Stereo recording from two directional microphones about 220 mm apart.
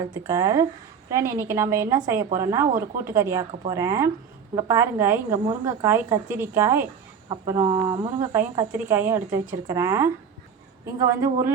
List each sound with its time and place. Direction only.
0.0 s speech: 15° right (ahead or behind)
7.3 s speech: 20° right (ahead or behind)